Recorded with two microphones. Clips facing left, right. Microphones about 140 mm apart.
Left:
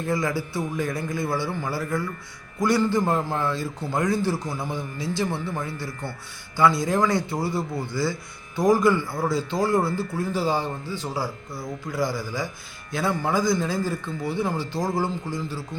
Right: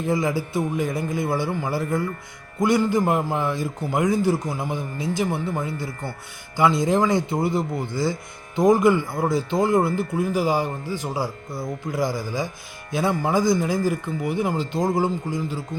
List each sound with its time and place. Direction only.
0.0 s a man's voice: 20° right (ahead or behind)